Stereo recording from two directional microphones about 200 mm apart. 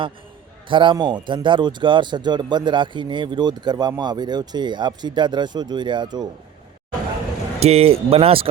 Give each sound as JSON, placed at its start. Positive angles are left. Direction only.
{"t": 0.7, "sound": "speech", "side_deg": -25}
{"t": 7.6, "sound": "speech", "side_deg": -30}